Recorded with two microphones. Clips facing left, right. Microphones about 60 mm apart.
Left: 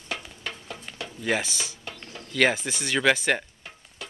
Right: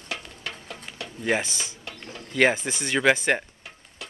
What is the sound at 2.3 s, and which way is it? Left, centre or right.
Speech, centre.